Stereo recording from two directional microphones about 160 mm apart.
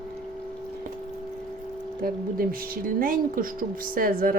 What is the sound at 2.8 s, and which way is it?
A woman's voice, 60° right (ahead or behind).